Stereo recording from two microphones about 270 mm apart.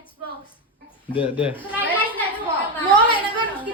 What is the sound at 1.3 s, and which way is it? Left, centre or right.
Speech, centre.